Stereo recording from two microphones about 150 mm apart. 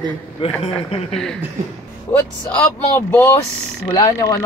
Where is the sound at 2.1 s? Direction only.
15° left (ahead or behind).